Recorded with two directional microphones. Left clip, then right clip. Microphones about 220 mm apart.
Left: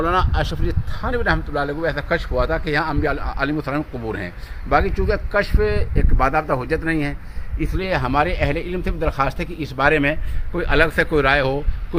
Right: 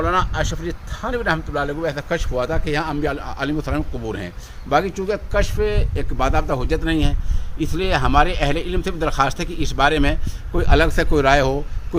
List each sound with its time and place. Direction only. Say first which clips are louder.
0.0 s speech: even; 25° left (ahead or behind); by 5.6 s centre (ahead or behind)
6.0 s a man's voice: left 3 dB; 15° right (ahead or behind)